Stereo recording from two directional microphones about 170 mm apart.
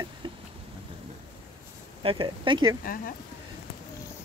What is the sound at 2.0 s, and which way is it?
Speech, 30° right (ahead or behind).